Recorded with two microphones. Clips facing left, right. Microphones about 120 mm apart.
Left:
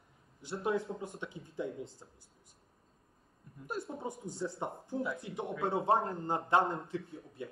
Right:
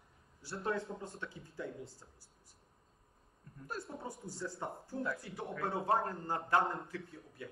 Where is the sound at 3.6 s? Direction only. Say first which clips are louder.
Left 4 dB; 25° left (ahead or behind).